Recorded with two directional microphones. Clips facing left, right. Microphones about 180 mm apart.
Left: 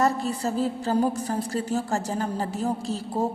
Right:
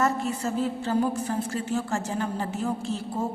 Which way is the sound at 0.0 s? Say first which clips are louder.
Left 2 dB; 35° left (ahead or behind).